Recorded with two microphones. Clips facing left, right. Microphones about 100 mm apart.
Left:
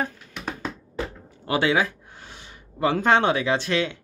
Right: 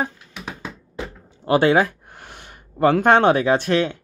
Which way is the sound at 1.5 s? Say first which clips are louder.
Right 6 dB; 45° right (ahead or behind).